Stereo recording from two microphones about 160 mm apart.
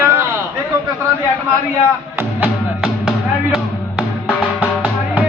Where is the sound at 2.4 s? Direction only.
5° right (ahead or behind).